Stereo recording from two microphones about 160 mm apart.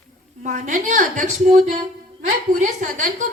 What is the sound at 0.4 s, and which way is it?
A woman's voice, 55° right (ahead or behind).